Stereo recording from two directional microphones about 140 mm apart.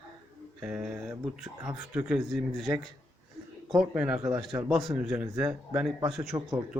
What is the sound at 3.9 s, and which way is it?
Speech, 5° right (ahead or behind).